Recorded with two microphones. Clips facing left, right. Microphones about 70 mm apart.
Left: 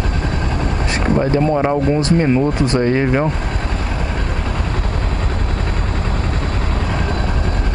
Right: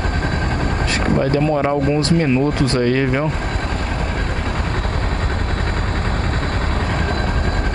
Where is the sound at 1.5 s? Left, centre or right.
Centre.